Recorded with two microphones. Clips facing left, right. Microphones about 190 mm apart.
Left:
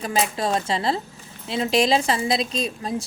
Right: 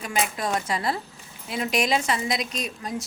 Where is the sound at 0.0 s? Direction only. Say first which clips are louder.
Left 4 dB; 30° left (ahead or behind).